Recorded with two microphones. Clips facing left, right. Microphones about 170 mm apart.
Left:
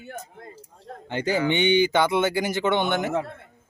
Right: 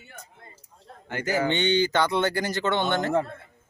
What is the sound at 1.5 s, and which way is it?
Speech, 10° left (ahead or behind).